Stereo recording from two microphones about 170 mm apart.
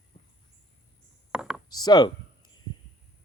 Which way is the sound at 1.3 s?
5° right (ahead or behind).